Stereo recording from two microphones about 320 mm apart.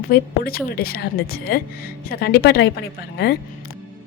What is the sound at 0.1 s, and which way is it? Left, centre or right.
A woman's voice, left.